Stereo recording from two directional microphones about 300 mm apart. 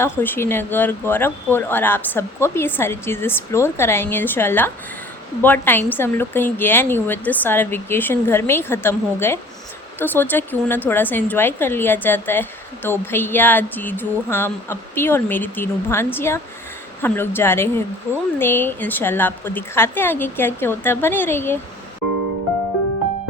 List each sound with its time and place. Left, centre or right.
0.0 s a woman's voice: centre